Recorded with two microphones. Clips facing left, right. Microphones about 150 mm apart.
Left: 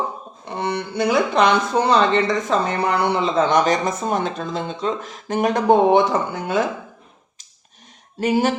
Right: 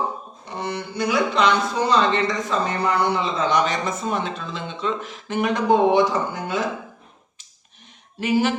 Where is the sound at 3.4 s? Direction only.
45° left (ahead or behind).